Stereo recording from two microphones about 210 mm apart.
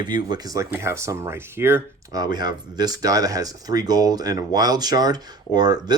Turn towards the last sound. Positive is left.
turn(degrees=-20)  # may be behind; listen again after turning